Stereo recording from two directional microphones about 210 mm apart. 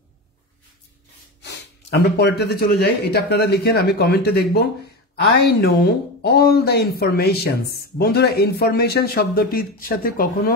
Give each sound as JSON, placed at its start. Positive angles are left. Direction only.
{"t": 1.4, "sound": "speech", "side_deg": 55}